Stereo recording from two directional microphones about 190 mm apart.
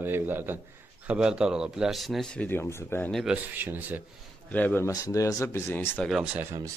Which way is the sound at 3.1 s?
5° right (ahead or behind).